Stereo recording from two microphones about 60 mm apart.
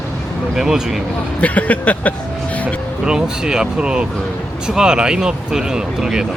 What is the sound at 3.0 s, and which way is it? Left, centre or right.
Speech, centre.